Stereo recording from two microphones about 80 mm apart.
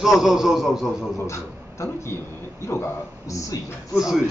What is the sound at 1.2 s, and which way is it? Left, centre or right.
Speech, left.